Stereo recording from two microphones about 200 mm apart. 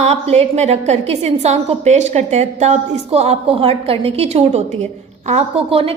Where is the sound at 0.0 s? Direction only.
30° right (ahead or behind).